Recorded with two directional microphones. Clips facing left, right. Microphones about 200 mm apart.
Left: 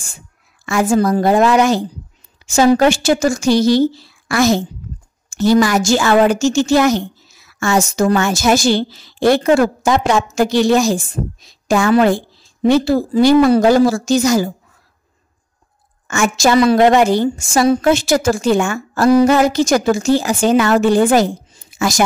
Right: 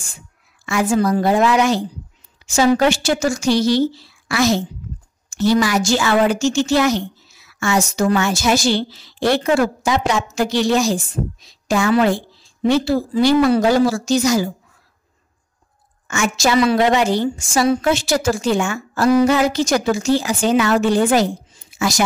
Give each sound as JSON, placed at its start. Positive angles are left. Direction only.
{"t": 0.7, "sound": "a woman's voice", "side_deg": 45}
{"t": 16.1, "sound": "a woman's voice", "side_deg": 50}